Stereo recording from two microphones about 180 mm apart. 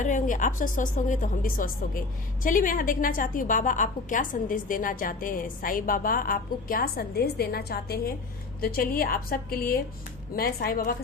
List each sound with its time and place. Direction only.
0.0 s a woman's voice: 45° left (ahead or behind)